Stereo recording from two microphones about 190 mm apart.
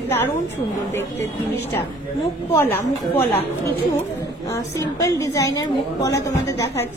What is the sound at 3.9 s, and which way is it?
A woman's voice, 15° left (ahead or behind).